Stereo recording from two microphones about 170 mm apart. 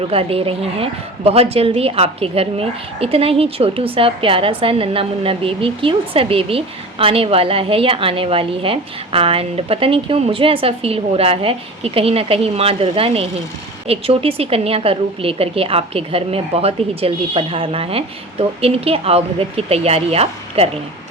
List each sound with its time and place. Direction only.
0.1 s a woman's voice: 35° right (ahead or behind)